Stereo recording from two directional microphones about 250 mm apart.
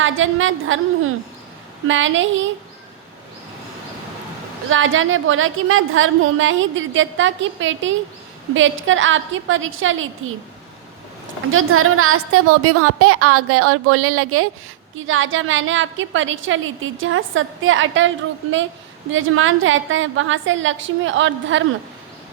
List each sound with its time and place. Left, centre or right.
0.0 s a woman's voice: right
1.9 s a woman's voice: right
4.7 s a woman's voice: right
11.5 s a woman's voice: right
19.1 s a woman's voice: right